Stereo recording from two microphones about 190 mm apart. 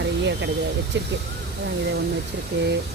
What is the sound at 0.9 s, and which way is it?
Speech, 65° right (ahead or behind).